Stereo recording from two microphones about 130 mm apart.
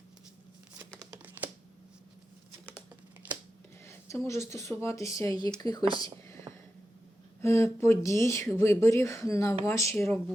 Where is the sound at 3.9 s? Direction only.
20° left (ahead or behind).